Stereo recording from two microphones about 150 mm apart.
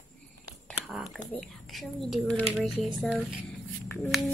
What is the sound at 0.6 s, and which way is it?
Whispering, centre (ahead or behind).